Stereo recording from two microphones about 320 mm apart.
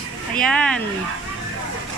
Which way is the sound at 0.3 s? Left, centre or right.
Centre.